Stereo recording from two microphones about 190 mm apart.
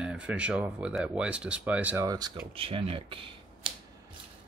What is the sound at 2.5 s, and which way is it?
Speech, 30° right (ahead or behind).